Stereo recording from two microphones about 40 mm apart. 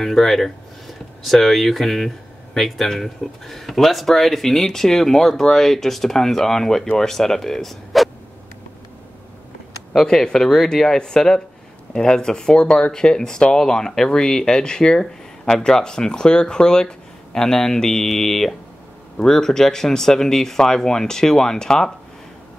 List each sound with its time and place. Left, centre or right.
0.0 s speech: centre
10.2 s speech: centre